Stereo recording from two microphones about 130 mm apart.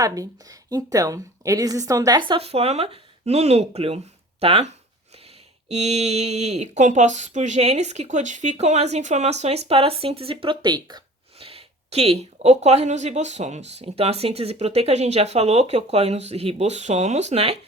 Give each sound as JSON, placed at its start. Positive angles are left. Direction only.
{"t": 0.0, "sound": "a woman's voice", "side_deg": -25}
{"t": 11.3, "sound": "speech", "side_deg": -50}